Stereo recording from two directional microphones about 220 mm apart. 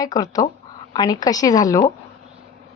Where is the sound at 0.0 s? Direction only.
15° left (ahead or behind).